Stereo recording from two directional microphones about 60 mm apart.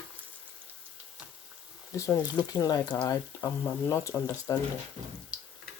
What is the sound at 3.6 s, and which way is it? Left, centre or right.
Speech, left.